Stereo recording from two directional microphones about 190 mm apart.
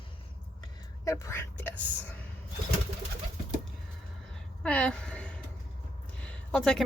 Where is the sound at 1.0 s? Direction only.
15° left (ahead or behind).